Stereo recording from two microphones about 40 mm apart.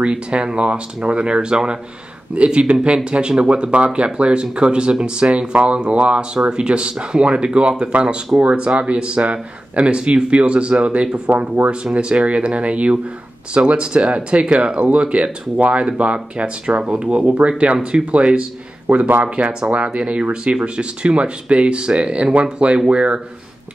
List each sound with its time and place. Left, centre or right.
0.0 s speech: right
11.2 s speech: right
11.7 s speech: right